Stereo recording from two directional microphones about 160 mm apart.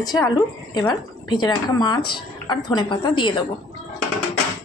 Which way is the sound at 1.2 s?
25° left (ahead or behind).